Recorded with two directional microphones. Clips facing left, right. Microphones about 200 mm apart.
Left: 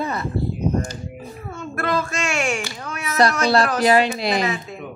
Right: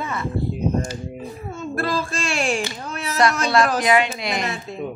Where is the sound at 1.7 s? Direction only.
30° right (ahead or behind).